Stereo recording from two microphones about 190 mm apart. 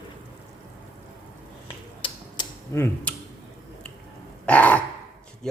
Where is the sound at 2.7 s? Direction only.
15° left (ahead or behind).